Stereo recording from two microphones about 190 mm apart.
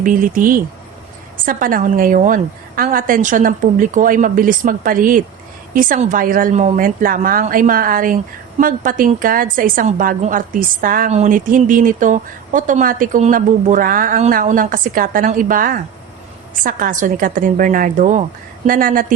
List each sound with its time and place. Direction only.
0.0 s a woman's voice: 45° right (ahead or behind)